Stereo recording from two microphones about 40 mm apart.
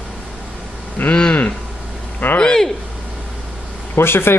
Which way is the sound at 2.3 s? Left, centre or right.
Left.